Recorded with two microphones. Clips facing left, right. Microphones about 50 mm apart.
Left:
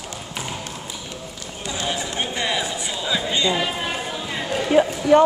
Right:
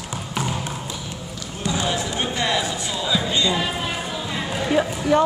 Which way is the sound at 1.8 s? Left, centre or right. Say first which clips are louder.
Right 2 dB; left.